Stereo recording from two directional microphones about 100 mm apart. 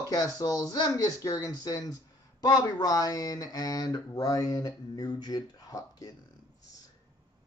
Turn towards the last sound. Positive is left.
turn(degrees=40)  # may be behind; listen again after turning